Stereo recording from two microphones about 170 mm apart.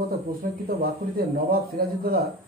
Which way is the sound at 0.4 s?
60° right (ahead or behind).